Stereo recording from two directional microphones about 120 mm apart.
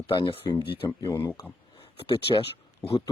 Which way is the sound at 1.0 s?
25° left (ahead or behind).